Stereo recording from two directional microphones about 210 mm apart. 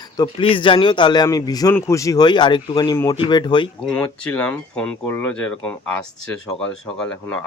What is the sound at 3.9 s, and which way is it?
Speech, 5° left (ahead or behind).